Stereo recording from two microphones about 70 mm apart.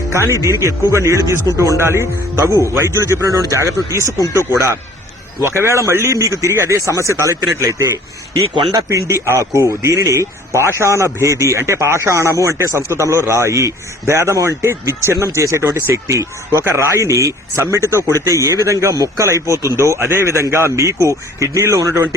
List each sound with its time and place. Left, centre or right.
0.1 s speech: right
1.8 s speech: right
5.4 s speech: right
9.6 s speech: right
17.0 s speech: right